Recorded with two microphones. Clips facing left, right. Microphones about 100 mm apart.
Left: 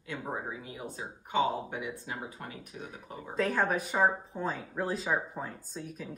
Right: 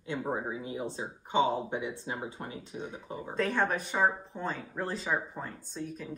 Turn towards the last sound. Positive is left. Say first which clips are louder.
# right 2 dB
turn(degrees=0)  # may be behind; listen again after turning